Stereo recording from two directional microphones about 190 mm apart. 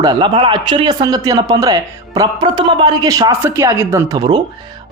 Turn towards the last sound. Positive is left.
turn(degrees=-20)  # may be behind; listen again after turning